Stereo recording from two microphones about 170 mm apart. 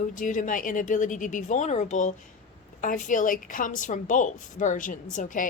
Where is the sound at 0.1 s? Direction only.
50° left (ahead or behind).